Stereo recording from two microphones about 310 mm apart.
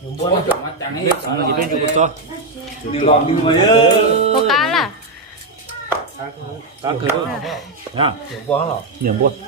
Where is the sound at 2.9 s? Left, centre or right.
Centre.